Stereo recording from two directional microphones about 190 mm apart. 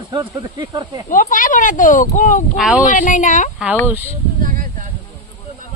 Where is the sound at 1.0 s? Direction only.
45° left (ahead or behind).